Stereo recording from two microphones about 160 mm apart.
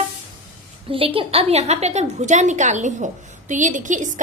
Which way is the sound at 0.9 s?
35° right (ahead or behind).